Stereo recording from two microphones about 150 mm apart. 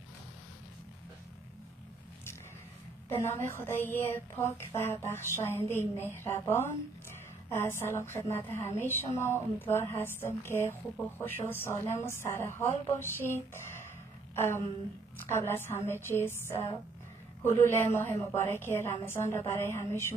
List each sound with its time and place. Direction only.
3.1 s a woman's voice: 15° left (ahead or behind)